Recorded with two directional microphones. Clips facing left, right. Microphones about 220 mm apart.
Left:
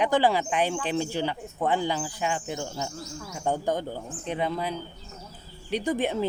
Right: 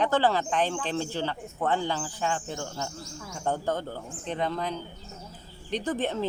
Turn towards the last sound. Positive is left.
turn(degrees=10)  # may be behind; listen again after turning